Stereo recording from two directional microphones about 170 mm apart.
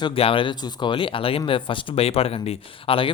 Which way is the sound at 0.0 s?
30° left (ahead or behind).